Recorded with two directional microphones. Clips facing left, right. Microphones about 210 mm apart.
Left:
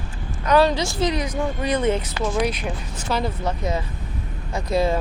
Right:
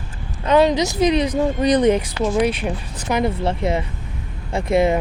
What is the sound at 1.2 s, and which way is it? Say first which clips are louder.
Speech: right 6 dB; 35° right (ahead or behind).